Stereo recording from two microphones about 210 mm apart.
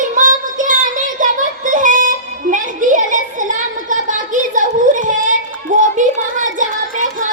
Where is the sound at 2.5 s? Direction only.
40° right (ahead or behind).